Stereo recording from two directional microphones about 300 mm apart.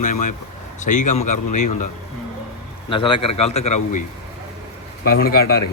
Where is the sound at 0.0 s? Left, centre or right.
Left.